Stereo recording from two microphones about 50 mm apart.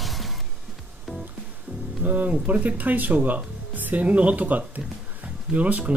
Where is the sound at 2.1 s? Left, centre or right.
Right.